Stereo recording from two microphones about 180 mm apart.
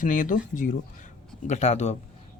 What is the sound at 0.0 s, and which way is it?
Speech, 45° left (ahead or behind).